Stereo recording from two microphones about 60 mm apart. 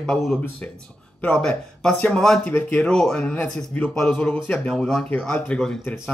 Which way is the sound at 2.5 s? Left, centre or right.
Left.